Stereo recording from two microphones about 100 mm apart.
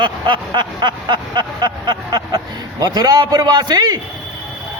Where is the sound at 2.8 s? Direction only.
40° right (ahead or behind).